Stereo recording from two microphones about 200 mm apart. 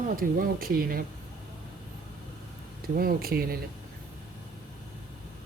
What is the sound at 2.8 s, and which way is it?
Speech, 45° right (ahead or behind).